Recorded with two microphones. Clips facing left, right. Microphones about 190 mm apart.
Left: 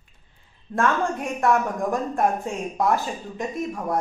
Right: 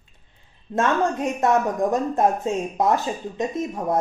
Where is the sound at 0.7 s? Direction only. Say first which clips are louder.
Right 2 dB; 20° right (ahead or behind).